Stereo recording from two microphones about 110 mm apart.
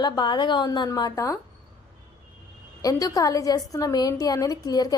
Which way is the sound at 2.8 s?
30° left (ahead or behind).